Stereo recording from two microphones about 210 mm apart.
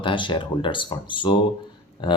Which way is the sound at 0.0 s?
25° left (ahead or behind).